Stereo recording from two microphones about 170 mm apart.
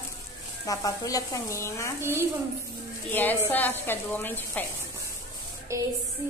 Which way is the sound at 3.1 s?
10° left (ahead or behind).